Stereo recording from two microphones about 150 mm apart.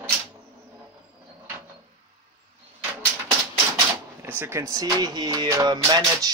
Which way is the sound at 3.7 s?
15° right (ahead or behind).